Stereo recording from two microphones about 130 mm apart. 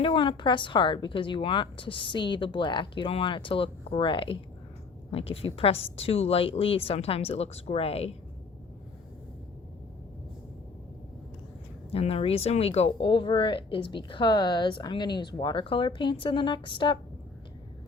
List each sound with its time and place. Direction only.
0.0 s a woman's voice: 40° left (ahead or behind)
11.9 s speech: 50° left (ahead or behind)